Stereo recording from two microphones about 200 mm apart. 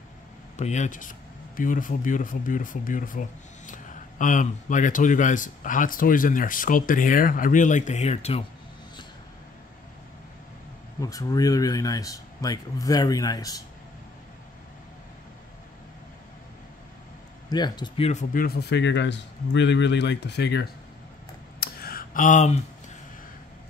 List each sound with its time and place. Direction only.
0.6 s speech: 35° left (ahead or behind)
11.0 s speech: 15° left (ahead or behind)
17.5 s speech: 20° left (ahead or behind)
18.3 s speech: 50° left (ahead or behind)
21.5 s a sound: 50° left (ahead or behind)